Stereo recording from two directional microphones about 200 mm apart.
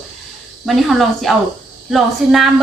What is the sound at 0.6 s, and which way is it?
Speech, centre (ahead or behind).